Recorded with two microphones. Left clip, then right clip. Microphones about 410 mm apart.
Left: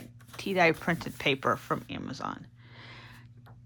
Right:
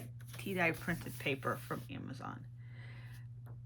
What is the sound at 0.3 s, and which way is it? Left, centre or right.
Speech, centre.